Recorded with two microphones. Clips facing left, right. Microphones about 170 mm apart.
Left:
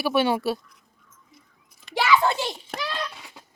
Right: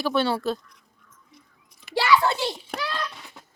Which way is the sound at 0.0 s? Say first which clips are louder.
Left 1 dB; 15° left (ahead or behind).